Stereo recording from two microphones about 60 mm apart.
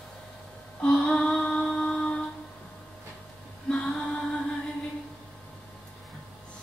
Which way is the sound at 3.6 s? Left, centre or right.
Centre.